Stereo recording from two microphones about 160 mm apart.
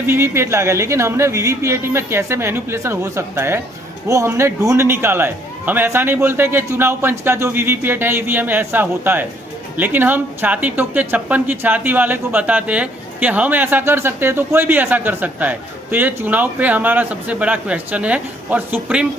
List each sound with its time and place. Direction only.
0.1 s speech: 15° right (ahead or behind)